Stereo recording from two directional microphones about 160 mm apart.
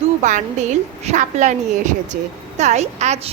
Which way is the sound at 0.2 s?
50° right (ahead or behind).